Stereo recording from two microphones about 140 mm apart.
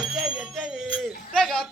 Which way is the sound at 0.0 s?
5° right (ahead or behind).